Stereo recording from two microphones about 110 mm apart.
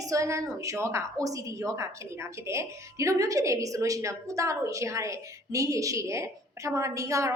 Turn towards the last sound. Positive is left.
turn(degrees=-30)  # may be behind; listen again after turning